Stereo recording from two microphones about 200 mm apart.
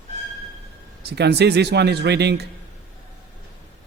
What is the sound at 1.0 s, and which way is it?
Speech, 55° right (ahead or behind).